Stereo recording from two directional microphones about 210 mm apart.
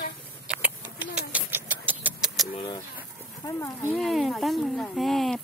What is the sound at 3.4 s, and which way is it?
Speech, 15° left (ahead or behind).